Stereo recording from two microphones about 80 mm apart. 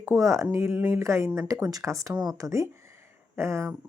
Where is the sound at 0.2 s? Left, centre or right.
Right.